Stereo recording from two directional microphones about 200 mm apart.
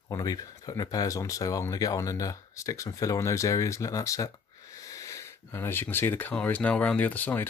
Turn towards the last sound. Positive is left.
turn(degrees=10)  # may be behind; listen again after turning